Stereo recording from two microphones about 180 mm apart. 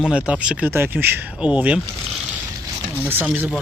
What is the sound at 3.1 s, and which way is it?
Speech, 10° right (ahead or behind).